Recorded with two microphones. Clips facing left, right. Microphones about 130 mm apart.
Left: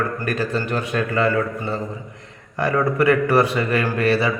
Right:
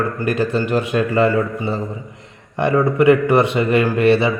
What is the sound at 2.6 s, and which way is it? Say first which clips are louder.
A man's voice: right 4 dB; 20° right (ahead or behind).